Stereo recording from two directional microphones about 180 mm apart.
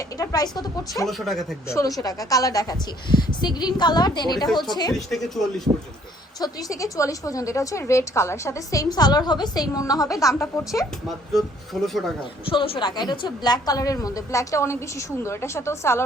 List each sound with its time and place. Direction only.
0.2 s a woman's voice: 20° left (ahead or behind)
1.0 s speech: centre (ahead or behind)
1.6 s a woman's voice: 15° left (ahead or behind)
4.9 s speech: centre (ahead or behind)
6.4 s a woman's voice: 20° left (ahead or behind)
11.3 s speech: centre (ahead or behind)
12.5 s a woman's voice: 30° left (ahead or behind); by 16.0 s 15° left (ahead or behind)